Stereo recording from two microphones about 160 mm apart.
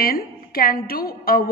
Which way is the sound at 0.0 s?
65° left (ahead or behind).